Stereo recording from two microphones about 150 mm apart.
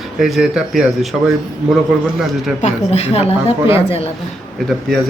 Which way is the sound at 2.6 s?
50° left (ahead or behind).